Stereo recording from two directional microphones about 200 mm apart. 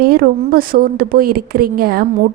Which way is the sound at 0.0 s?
45° right (ahead or behind).